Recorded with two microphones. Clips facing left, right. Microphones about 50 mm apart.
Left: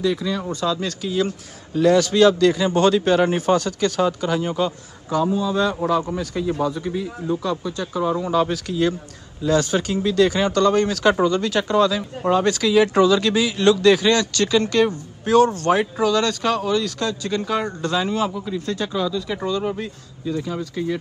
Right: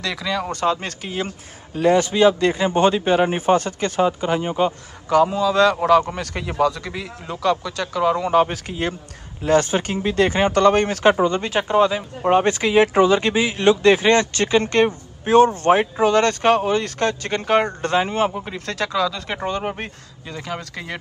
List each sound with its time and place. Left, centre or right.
0.0 s speech: right
0.6 s speech: right
5.1 s a man's voice: right
6.6 s speech: right
8.3 s speech: right
18.5 s a man's voice: right
19.2 s speech: right
20.2 s a man's voice: right